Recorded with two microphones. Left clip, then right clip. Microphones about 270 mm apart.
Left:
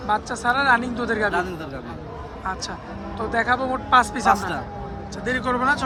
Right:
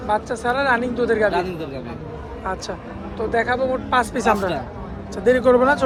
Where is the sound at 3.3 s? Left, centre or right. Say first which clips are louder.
Right 1 dB; centre.